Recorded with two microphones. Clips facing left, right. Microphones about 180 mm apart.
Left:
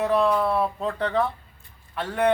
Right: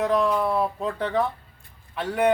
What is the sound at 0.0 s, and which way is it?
A man's voice, 10° right (ahead or behind).